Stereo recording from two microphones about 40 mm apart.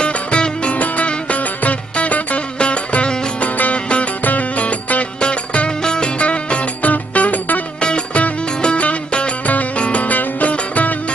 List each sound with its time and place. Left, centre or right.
0.0 s music: left
4.2 s music: left
6.8 s music: left
7.8 s music: left
9.5 s music: left